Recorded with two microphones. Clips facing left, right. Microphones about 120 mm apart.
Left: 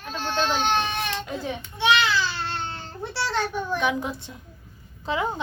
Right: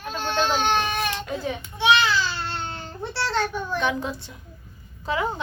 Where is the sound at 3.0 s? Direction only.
10° left (ahead or behind).